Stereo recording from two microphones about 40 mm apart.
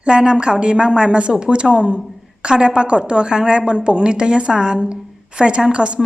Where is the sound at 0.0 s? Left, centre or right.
Right.